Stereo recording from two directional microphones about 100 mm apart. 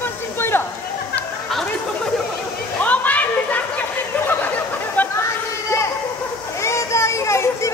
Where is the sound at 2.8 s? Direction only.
15° left (ahead or behind).